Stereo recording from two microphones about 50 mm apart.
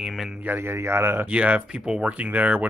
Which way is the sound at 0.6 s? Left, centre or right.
Right.